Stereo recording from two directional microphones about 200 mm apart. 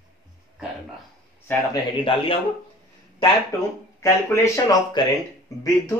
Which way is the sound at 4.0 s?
15° left (ahead or behind).